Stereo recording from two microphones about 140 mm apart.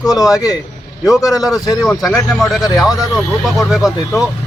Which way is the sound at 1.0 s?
5° right (ahead or behind).